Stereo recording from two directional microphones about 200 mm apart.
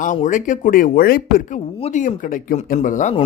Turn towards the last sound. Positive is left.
turn(degrees=35)  # may be behind; listen again after turning